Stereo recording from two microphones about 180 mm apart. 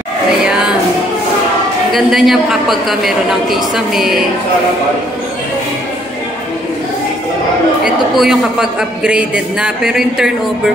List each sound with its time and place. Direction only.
1.9 s a man's voice: centre (ahead or behind)
7.8 s a man's voice: centre (ahead or behind)